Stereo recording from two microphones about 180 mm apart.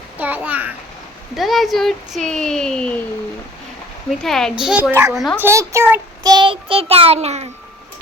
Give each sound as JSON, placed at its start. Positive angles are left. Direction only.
{"t": 0.2, "sound": "a child's voice", "side_deg": -10}
{"t": 4.2, "sound": "a child's voice", "side_deg": 0}
{"t": 6.3, "sound": "child singing", "side_deg": -30}